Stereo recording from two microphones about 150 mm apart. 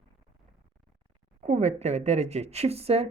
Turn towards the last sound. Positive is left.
turn(degrees=-45)  # may be behind; listen again after turning